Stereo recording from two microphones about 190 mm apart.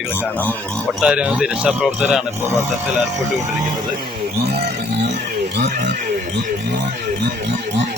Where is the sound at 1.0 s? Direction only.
5° right (ahead or behind).